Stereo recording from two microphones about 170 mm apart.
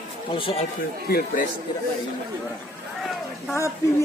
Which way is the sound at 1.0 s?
65° left (ahead or behind).